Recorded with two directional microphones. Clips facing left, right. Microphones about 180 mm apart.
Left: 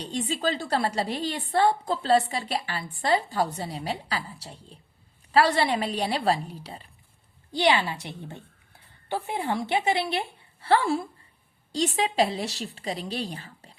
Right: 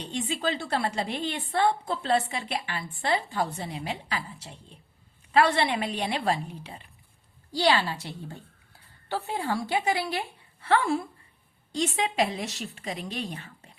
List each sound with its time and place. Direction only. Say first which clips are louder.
0.0 s a woman's voice: left 2 dB; 35° left (ahead or behind)
7.5 s a woman's voice: left 1 dB; 20° left (ahead or behind)